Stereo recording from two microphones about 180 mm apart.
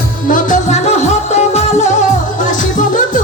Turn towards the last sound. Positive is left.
turn(degrees=45)  # may be behind; listen again after turning